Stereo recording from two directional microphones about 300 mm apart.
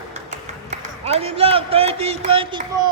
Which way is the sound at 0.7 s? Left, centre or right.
Right.